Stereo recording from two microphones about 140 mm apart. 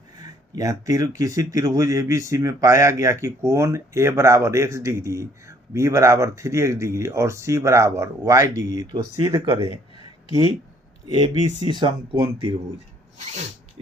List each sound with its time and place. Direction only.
0.2 s speech: 25° right (ahead or behind)
11.7 s speech: 35° right (ahead or behind)